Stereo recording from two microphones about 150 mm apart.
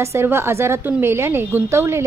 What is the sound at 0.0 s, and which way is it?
A woman's voice, 20° right (ahead or behind).